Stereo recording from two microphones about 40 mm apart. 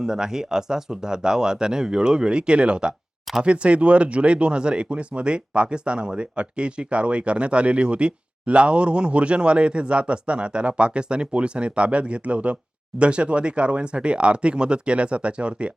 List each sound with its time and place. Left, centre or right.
0.0 s speech: centre